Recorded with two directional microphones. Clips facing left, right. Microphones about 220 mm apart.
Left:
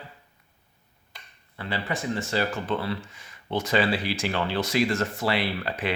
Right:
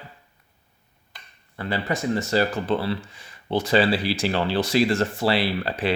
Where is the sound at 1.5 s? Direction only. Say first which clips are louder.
Right 4 dB; 45° right (ahead or behind).